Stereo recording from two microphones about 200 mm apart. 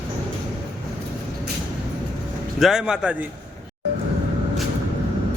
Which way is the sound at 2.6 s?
Centre (ahead or behind).